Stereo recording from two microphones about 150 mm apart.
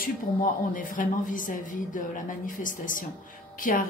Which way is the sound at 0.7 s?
65° left (ahead or behind).